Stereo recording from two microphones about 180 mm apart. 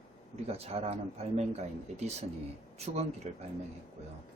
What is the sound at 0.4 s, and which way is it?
Speech, 35° right (ahead or behind).